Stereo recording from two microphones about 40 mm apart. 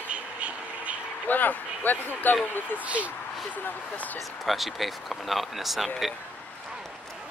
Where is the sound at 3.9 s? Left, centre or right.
Left.